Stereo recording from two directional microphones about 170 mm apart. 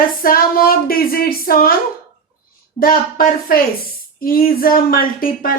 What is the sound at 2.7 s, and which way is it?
A woman's voice, 60° left (ahead or behind).